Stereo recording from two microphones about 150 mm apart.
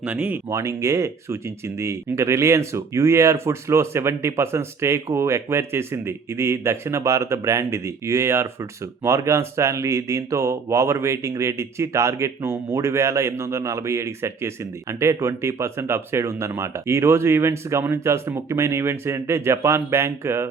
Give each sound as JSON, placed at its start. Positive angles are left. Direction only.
{"t": 0.0, "sound": "speech", "side_deg": -10}
{"t": 0.5, "sound": "speech", "side_deg": -20}